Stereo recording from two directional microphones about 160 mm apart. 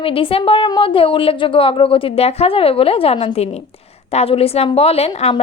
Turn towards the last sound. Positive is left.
turn(degrees=40)  # may be behind; listen again after turning